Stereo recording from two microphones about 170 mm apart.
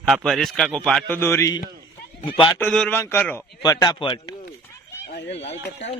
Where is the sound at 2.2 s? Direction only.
30° left (ahead or behind).